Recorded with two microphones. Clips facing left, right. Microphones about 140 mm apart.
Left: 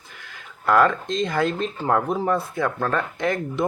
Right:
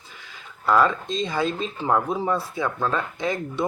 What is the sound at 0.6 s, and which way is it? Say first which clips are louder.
Speech: left 2 dB; 60° left (ahead or behind).